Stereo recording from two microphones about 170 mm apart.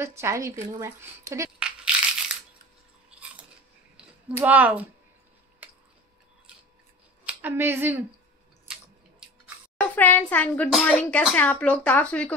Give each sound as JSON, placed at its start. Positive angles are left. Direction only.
{"t": 0.0, "sound": "a woman's voice", "side_deg": -15}
{"t": 1.9, "sound": "crushing", "side_deg": -5}
{"t": 4.4, "sound": "a woman's voice", "side_deg": -10}
{"t": 5.6, "sound": "a sound", "side_deg": -10}
{"t": 7.2, "sound": "speech", "side_deg": -10}
{"t": 9.8, "sound": "a child's voice", "side_deg": 10}